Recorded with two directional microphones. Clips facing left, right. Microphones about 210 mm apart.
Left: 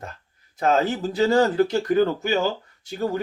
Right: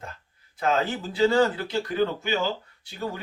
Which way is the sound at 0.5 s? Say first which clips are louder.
Left 4 dB; 40° left (ahead or behind).